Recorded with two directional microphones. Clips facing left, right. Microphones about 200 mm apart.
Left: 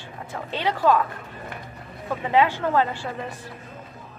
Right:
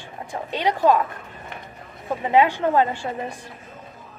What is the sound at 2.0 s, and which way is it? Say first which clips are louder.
A woman's voice: right 2 dB; 20° right (ahead or behind).